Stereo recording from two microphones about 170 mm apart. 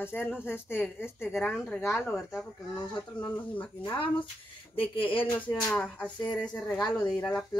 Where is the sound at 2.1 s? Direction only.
Centre (ahead or behind).